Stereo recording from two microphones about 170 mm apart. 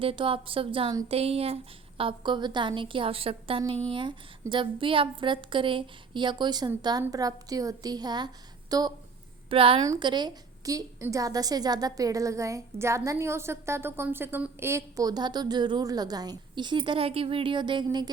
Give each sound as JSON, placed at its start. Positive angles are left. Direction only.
{"t": 0.0, "sound": "a woman's voice", "side_deg": -30}
{"t": 9.5, "sound": "a woman's voice", "side_deg": -30}